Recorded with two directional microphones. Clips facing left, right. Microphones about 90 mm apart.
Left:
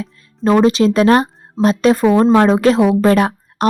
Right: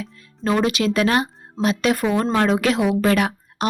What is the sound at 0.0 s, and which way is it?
A woman's voice, 35° left (ahead or behind).